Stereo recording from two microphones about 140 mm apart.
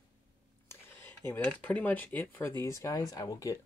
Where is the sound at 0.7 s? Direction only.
15° left (ahead or behind).